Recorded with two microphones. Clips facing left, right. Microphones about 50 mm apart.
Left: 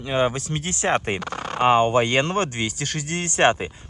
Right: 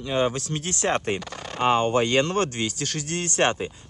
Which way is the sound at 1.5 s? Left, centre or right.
Centre.